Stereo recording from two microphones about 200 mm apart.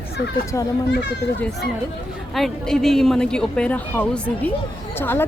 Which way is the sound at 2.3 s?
Centre (ahead or behind).